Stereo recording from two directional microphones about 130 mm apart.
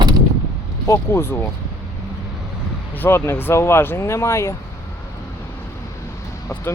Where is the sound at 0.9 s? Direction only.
20° left (ahead or behind).